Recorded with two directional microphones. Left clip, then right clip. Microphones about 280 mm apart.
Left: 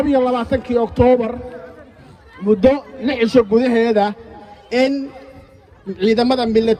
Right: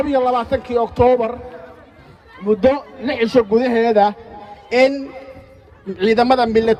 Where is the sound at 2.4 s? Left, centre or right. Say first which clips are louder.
Left 1 dB; right.